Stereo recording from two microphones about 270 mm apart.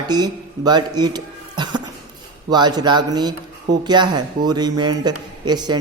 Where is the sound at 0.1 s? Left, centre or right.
Centre.